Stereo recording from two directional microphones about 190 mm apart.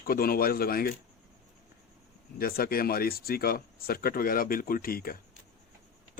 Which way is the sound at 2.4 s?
50° left (ahead or behind).